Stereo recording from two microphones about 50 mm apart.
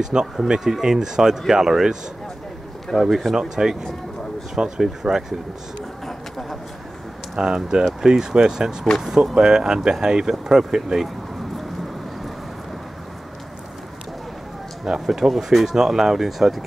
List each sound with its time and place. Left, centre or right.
0.0 s speech: centre
6.0 s a sound: centre
7.3 s speech: centre
14.9 s speech: centre